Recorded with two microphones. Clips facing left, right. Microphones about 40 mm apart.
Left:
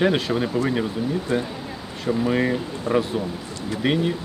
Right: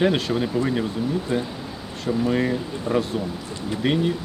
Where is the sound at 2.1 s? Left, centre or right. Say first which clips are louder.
Left 1 dB; centre.